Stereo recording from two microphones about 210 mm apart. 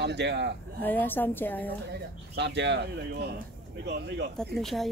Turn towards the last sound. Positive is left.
turn(degrees=0)  # may be behind; listen again after turning